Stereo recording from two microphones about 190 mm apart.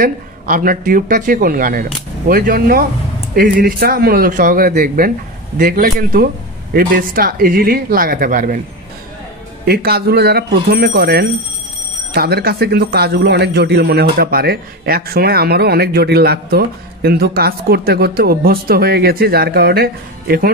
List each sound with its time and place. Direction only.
0.0 s speech: 45° right (ahead or behind)
9.7 s speech: 55° right (ahead or behind)